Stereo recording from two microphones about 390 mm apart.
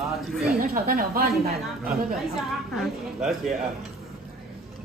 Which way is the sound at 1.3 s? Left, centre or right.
Centre.